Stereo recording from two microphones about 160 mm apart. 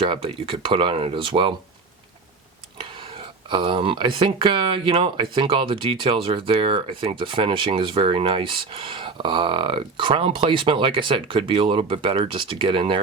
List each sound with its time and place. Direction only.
0.0 s speech: 35° right (ahead or behind)
3.5 s speech: 30° right (ahead or behind)